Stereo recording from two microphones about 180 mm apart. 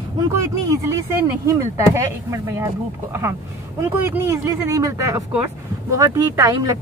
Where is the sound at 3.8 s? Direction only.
15° right (ahead or behind).